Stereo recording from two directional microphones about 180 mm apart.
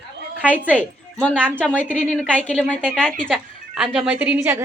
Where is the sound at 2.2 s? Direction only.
5° left (ahead or behind).